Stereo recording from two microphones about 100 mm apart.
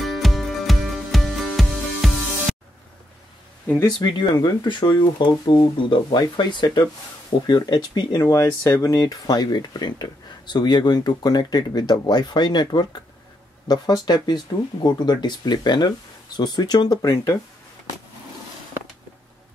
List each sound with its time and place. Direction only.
0.0 s music: centre (ahead or behind)
4.0 s speech: 50° left (ahead or behind)
8.2 s speech: 30° left (ahead or behind)